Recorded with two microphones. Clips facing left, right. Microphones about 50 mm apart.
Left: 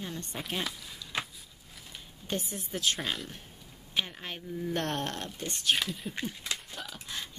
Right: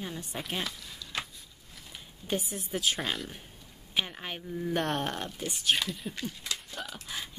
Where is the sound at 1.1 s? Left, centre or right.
Left.